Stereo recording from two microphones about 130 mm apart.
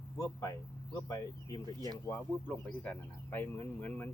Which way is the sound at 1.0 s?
25° left (ahead or behind).